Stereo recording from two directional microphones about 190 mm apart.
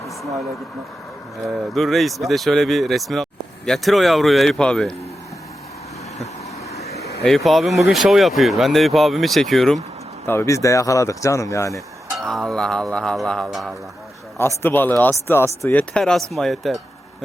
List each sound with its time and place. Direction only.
1.7 s speech: centre (ahead or behind)
6.7 s vehicle: 55° left (ahead or behind)
7.2 s speech: centre (ahead or behind)
10.2 s speech: 15° left (ahead or behind)
12.2 s speech: centre (ahead or behind)
14.3 s speech: 10° left (ahead or behind)